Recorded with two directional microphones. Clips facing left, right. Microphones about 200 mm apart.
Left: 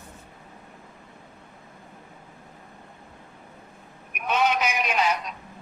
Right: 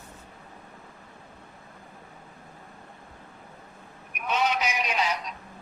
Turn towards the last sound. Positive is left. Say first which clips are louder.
# left 3 dB
turn(degrees=55)  # may be behind; listen again after turning